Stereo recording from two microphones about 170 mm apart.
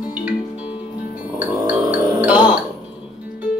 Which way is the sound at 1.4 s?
10° right (ahead or behind).